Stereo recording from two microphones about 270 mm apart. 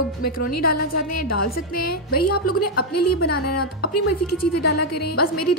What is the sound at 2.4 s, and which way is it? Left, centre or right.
A woman's voice, left.